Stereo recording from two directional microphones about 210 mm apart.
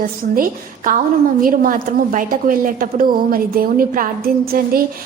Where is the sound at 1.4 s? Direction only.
40° right (ahead or behind).